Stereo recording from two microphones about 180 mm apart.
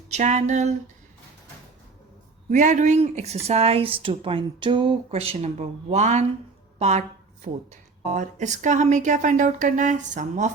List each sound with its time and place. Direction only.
0.1 s speech: 40° right (ahead or behind)
2.5 s speech: 45° right (ahead or behind)